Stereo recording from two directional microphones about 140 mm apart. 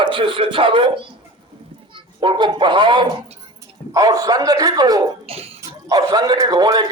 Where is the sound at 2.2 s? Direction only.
35° right (ahead or behind).